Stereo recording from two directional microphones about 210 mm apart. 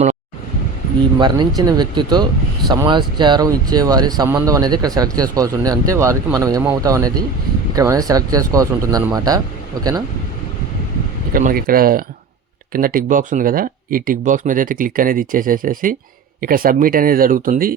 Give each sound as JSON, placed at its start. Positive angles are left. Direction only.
{"t": 1.2, "sound": "speech", "side_deg": -20}
{"t": 11.3, "sound": "speech", "side_deg": -40}